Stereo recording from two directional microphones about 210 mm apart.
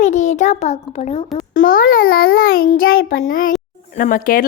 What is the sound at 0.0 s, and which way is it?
A child's voice, 35° left (ahead or behind).